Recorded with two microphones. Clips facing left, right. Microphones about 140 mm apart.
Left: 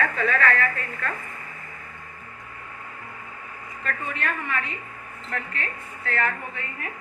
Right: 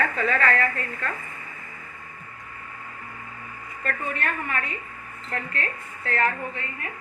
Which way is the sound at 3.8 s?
45° right (ahead or behind).